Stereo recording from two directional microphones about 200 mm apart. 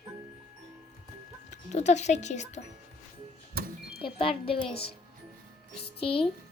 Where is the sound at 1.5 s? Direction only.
35° left (ahead or behind).